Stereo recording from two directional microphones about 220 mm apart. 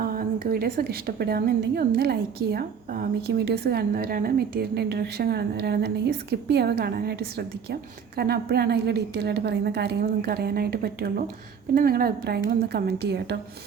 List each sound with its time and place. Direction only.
0.0 s a woman's voice: 40° right (ahead or behind)